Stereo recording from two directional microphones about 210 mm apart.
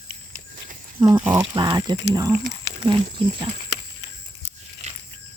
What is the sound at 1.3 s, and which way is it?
Speech, 20° right (ahead or behind).